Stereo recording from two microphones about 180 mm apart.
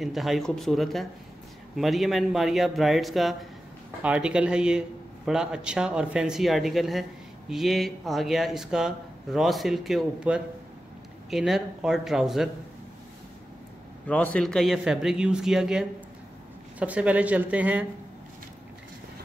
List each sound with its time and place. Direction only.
0.0 s a man's voice: centre (ahead or behind)
14.0 s a man's voice: 5° left (ahead or behind)